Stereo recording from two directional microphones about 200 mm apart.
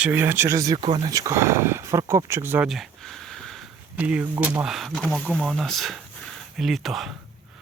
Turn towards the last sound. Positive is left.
turn(degrees=0)  # may be behind; listen again after turning